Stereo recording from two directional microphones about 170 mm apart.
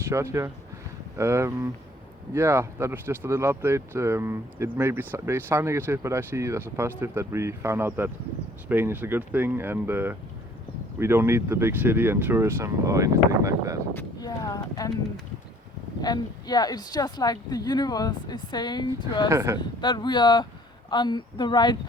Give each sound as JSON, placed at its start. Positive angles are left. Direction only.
{"t": 0.0, "sound": "speech", "side_deg": -15}
{"t": 13.9, "sound": "a woman's voice", "side_deg": 20}
{"t": 16.0, "sound": "a woman's voice", "side_deg": 25}
{"t": 19.3, "sound": "speech", "side_deg": -15}
{"t": 19.5, "sound": "a woman's voice", "side_deg": 25}